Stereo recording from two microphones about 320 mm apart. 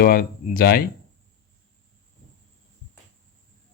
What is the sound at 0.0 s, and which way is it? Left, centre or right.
Speech, left.